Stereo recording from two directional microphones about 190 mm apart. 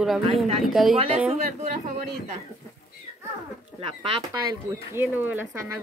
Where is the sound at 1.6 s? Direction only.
35° right (ahead or behind).